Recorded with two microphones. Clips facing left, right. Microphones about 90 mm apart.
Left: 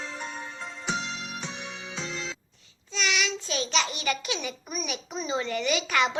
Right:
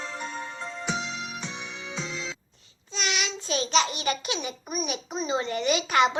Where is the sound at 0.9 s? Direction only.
Centre (ahead or behind).